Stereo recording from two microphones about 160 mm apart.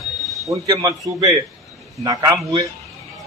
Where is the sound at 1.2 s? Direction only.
20° right (ahead or behind).